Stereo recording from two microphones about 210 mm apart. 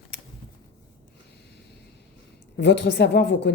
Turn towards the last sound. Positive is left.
turn(degrees=55)  # may be behind; listen again after turning